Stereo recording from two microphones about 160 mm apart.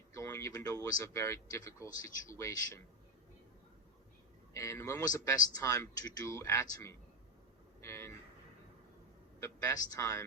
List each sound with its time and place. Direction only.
0.1 s speech: 20° left (ahead or behind)
4.5 s speech: 20° left (ahead or behind)
7.8 s vehicle: 15° left (ahead or behind)
9.4 s speech: 20° left (ahead or behind)